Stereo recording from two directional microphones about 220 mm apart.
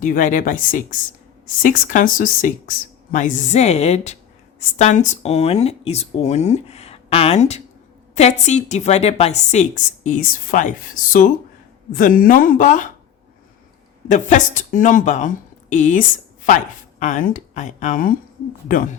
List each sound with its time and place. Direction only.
0.0 s a woman's voice: 35° left (ahead or behind)
14.1 s a woman's voice: 35° left (ahead or behind)